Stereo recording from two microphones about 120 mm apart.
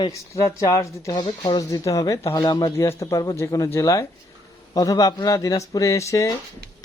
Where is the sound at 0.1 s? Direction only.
25° left (ahead or behind).